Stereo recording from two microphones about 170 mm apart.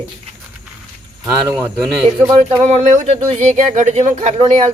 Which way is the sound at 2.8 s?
45° right (ahead or behind).